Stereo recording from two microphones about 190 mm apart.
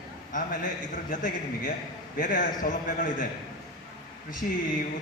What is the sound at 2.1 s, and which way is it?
Speech, 50° left (ahead or behind).